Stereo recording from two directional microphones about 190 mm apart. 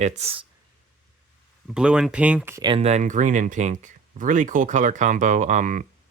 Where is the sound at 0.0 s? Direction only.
30° right (ahead or behind).